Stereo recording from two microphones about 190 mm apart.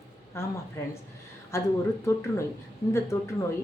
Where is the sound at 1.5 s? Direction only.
15° left (ahead or behind).